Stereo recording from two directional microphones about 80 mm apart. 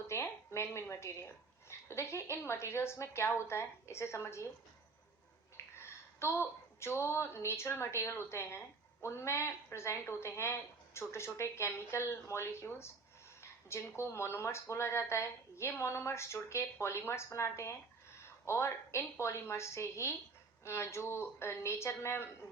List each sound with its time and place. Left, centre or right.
0.1 s a sound: left
1.9 s speech: left
5.8 s a woman's voice: left